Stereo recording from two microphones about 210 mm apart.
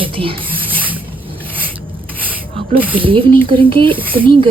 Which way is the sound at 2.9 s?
25° right (ahead or behind).